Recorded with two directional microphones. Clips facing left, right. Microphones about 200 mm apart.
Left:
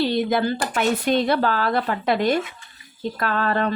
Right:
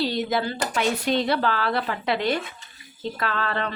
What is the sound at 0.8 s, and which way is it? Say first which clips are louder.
A woman's voice: left 3 dB; 50° left (ahead or behind).